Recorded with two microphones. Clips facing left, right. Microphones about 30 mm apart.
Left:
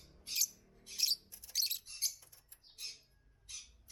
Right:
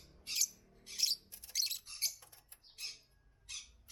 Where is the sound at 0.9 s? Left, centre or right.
Centre.